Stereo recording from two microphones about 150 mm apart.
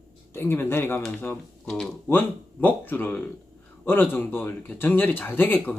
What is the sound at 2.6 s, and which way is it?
Speech, 10° left (ahead or behind).